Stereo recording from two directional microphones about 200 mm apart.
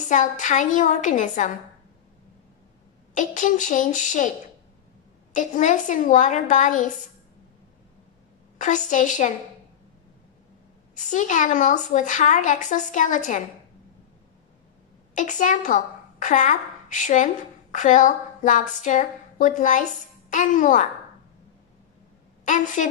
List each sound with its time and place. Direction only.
0.0 s a woman's voice: 40° left (ahead or behind)
3.2 s a woman's voice: 40° left (ahead or behind)
5.3 s a woman's voice: 40° left (ahead or behind)
8.5 s a woman's voice: 40° left (ahead or behind)
11.0 s a woman's voice: 40° left (ahead or behind)
15.1 s a woman's voice: 40° left (ahead or behind)
22.4 s a woman's voice: 40° left (ahead or behind)